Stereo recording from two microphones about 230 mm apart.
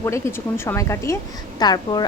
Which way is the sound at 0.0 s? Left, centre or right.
Centre.